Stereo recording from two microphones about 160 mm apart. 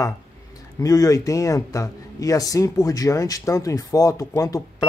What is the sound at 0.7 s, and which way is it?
Speech, 20° left (ahead or behind).